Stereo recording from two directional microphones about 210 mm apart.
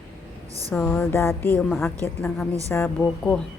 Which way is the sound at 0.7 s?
10° left (ahead or behind).